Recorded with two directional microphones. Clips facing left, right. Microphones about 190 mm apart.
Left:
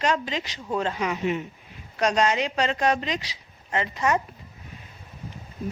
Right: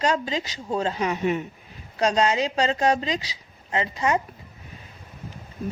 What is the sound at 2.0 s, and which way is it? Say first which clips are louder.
A woman's voice: right 1 dB; 30° right (ahead or behind).